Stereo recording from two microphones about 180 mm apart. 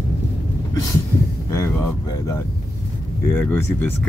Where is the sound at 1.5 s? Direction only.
15° left (ahead or behind).